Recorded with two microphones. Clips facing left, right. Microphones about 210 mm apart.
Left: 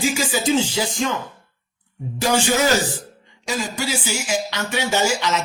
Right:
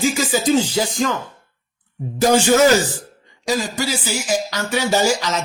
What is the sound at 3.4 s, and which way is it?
Speech, 35° right (ahead or behind).